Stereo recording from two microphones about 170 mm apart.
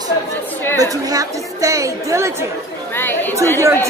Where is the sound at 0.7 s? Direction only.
20° right (ahead or behind).